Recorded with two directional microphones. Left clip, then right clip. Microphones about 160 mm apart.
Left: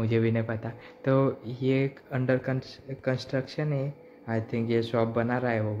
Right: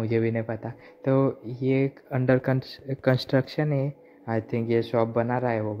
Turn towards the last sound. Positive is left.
turn(degrees=-35)  # may be behind; listen again after turning